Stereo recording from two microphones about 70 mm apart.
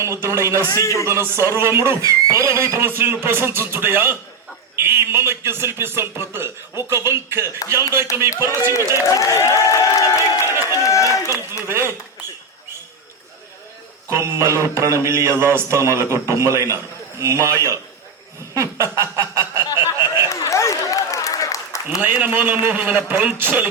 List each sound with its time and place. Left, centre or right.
0.0 s mantra: right
0.7 s speech: left
1.0 s mantra: right
2.0 s mantra: right
9.0 s speech: left
10.6 s run: left
11.7 s mantra: right
14.1 s mantra: right
18.5 s a sound: right
20.3 s applause: left
22.0 s a man's voice: right